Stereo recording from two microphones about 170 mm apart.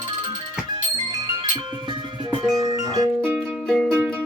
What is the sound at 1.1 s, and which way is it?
Music, 25° right (ahead or behind).